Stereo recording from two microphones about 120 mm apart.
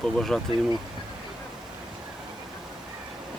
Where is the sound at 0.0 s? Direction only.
Centre (ahead or behind).